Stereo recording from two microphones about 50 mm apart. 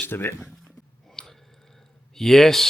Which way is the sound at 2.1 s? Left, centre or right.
Centre.